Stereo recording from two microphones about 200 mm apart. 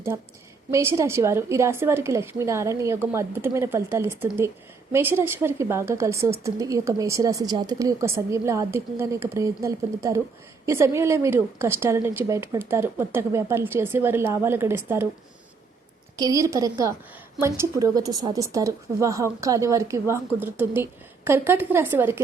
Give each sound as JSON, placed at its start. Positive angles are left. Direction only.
{"t": 0.7, "sound": "a woman's voice", "side_deg": -15}
{"t": 16.1, "sound": "a woman's voice", "side_deg": -15}